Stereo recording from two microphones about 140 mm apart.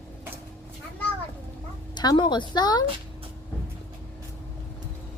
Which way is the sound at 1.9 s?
30° left (ahead or behind).